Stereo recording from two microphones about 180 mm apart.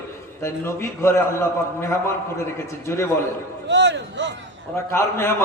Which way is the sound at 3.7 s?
75° right (ahead or behind).